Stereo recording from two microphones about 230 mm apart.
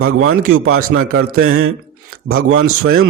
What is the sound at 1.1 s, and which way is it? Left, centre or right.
Speech, right.